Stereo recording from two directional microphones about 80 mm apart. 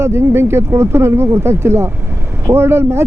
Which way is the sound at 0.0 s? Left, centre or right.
Right.